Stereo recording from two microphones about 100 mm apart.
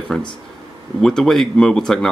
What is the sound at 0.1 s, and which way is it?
Speech, 10° left (ahead or behind).